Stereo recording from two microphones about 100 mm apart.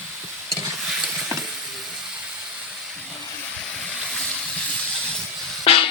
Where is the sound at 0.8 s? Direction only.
5° right (ahead or behind).